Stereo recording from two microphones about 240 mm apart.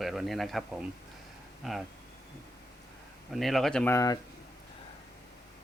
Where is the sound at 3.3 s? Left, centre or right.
Centre.